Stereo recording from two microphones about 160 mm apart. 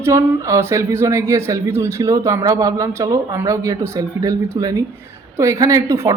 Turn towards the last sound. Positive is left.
turn(degrees=-20)  # may be behind; listen again after turning